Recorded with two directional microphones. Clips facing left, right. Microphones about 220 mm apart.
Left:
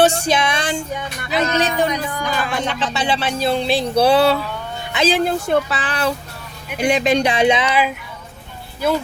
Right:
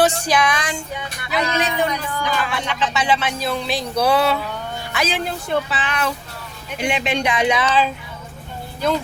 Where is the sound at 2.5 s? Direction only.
35° left (ahead or behind).